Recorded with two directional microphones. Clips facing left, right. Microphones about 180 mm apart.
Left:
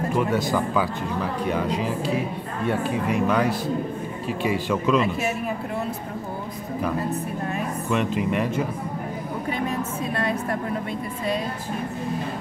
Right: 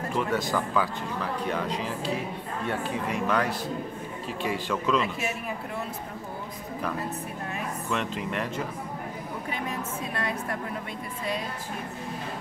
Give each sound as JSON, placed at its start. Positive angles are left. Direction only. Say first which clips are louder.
{"t": 0.1, "sound": "speech", "louder": "left 3 dB", "side_deg": 10}
{"t": 7.9, "sound": "speech", "louder": "left 7 dB", "side_deg": 10}